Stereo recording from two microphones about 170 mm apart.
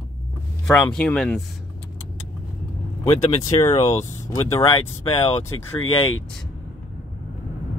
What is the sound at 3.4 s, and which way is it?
Speech, 20° left (ahead or behind).